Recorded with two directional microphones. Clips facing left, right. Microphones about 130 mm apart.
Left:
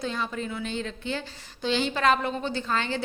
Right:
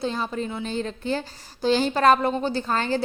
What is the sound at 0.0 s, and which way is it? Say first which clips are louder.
A woman's voice: right 4 dB; 35° right (ahead or behind).